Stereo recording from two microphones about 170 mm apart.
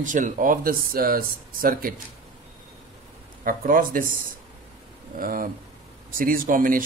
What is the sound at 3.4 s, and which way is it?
Speech, 55° right (ahead or behind).